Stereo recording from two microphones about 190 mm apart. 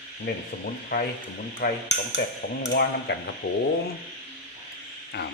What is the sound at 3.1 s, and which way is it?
Speech, 65° left (ahead or behind).